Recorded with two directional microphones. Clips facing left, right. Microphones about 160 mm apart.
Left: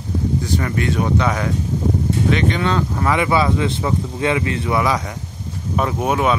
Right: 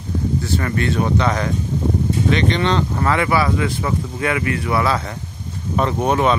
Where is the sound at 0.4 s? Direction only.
15° left (ahead or behind).